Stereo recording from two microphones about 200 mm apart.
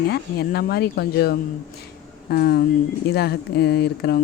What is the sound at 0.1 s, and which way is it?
Speech, 55° left (ahead or behind).